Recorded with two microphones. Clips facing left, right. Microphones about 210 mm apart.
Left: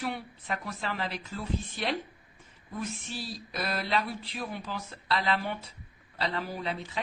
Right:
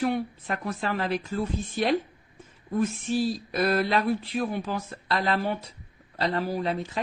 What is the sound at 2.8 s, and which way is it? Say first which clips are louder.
A woman's voice: right 13 dB; 50° right (ahead or behind).